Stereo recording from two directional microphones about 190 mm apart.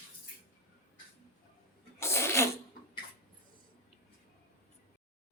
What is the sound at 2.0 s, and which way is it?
Sneeze, 15° left (ahead or behind).